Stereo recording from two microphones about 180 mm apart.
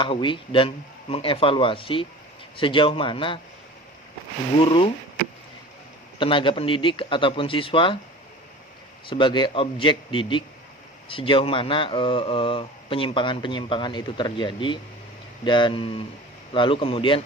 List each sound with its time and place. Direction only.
0.0 s speech: 30° left (ahead or behind)
4.6 s speech: 30° left (ahead or behind)
6.1 s speech: 30° left (ahead or behind)
9.0 s speech: 25° left (ahead or behind)